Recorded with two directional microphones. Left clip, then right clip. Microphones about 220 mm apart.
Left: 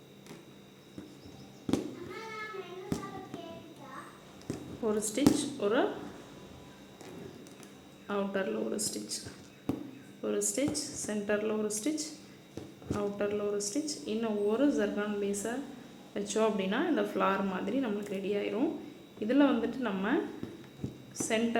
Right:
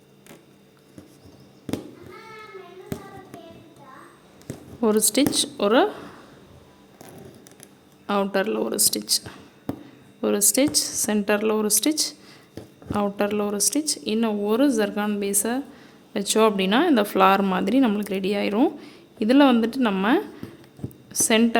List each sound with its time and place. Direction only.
4.8 s a woman's voice: 50° right (ahead or behind)
8.0 s a woman's voice: 50° right (ahead or behind)